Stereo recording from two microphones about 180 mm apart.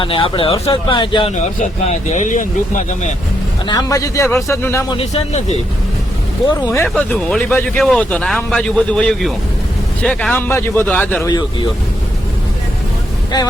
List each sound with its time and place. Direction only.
0.0 s speech: 30° left (ahead or behind)
1.4 s speech: 40° left (ahead or behind)
3.7 s speech: 20° left (ahead or behind)
4.9 s speech: 35° left (ahead or behind)
6.5 s speech: 15° left (ahead or behind)
11.3 s speech: 25° left (ahead or behind)